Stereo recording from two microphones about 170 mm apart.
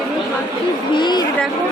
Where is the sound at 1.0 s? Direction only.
25° left (ahead or behind).